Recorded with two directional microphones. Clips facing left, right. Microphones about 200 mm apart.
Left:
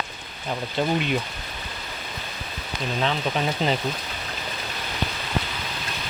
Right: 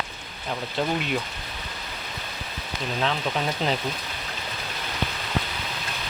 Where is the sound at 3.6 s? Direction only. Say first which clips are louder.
Left 2 dB; centre (ahead or behind).